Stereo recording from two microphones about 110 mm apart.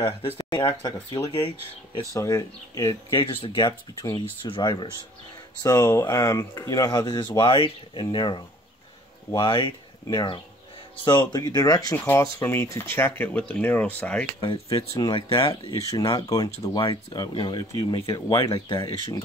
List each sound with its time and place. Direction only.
0.4 s speech: 40° left (ahead or behind)
2.1 s speech: 30° left (ahead or behind)
3.2 s speech: 50° left (ahead or behind)
5.6 s speech: 35° left (ahead or behind)
7.3 s speech: 50° left (ahead or behind); by 11.9 s 35° left (ahead or behind)
11.9 s speech: 25° left (ahead or behind)
15.0 s speech: 45° left (ahead or behind)
15.9 s speech: 35° left (ahead or behind)